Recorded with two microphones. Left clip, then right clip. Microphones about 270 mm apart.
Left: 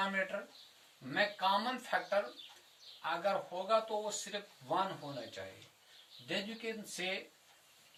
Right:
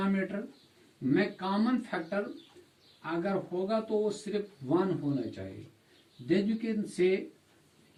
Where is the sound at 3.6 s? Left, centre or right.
Left.